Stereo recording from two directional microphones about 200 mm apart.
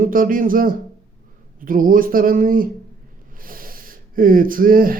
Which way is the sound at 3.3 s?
45° right (ahead or behind).